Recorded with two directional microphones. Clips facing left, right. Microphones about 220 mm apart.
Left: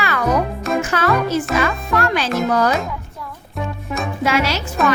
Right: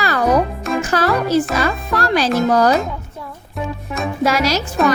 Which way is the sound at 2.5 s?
35° right (ahead or behind).